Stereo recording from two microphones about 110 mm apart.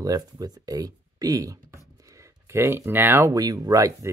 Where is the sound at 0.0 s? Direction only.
35° right (ahead or behind).